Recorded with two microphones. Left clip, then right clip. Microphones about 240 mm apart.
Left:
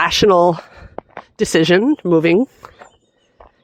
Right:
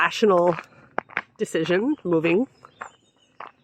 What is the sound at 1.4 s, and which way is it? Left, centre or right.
Speech, left.